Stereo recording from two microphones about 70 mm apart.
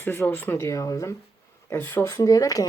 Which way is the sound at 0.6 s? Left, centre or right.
Left.